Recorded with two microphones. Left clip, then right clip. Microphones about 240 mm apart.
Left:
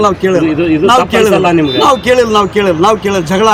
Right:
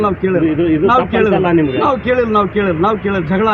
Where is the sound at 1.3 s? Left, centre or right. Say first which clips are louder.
Left 4 dB; left.